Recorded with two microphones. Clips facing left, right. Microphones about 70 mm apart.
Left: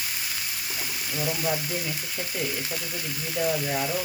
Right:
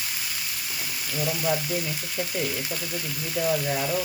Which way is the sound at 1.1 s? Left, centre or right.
Centre.